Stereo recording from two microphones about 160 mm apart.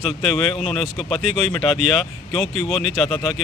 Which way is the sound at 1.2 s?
45° right (ahead or behind).